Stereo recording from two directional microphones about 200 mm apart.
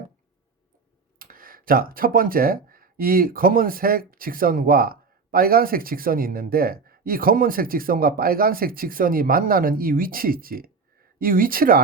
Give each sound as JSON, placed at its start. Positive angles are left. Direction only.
{"t": 1.2, "sound": "speech", "side_deg": -45}